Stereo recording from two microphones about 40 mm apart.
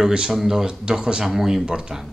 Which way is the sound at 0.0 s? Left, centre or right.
Centre.